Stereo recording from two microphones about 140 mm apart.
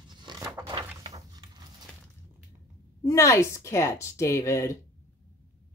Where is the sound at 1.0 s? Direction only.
30° right (ahead or behind).